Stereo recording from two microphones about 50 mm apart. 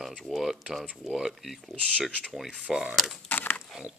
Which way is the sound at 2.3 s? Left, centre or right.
Centre.